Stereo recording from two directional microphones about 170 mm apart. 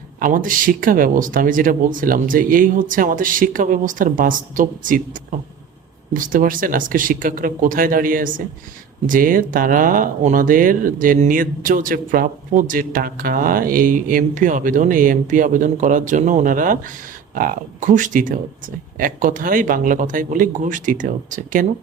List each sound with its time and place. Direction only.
0.2 s speech: 55° right (ahead or behind)
6.1 s speech: 55° right (ahead or behind)